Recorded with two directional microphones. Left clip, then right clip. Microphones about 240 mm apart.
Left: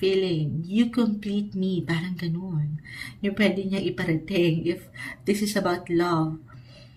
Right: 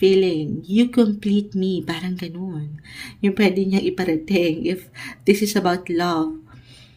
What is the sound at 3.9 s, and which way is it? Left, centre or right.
Speech, right.